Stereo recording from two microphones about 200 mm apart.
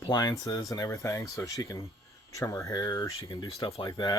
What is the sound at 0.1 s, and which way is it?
Speech, 20° left (ahead or behind).